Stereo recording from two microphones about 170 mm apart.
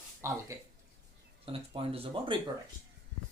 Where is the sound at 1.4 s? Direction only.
35° right (ahead or behind).